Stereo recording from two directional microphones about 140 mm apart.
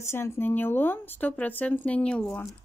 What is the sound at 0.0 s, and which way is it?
Speech, 20° left (ahead or behind).